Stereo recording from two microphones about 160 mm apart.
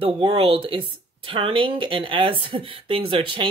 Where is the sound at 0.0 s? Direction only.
35° right (ahead or behind).